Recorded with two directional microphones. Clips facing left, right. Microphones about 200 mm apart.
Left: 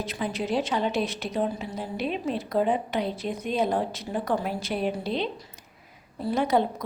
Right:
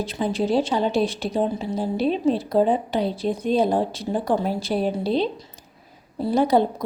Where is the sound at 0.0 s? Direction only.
30° right (ahead or behind).